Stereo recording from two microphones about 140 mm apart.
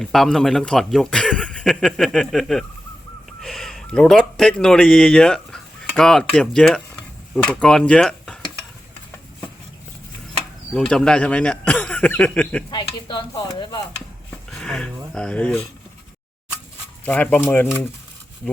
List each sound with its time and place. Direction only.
0.0 s a man's voice: 5° left (ahead or behind)
10.8 s speech: 5° left (ahead or behind)
12.7 s speech: 35° left (ahead or behind)
14.3 s a sound: 5° left (ahead or behind)
15.1 s speech: 5° left (ahead or behind)
17.1 s speech: 10° left (ahead or behind)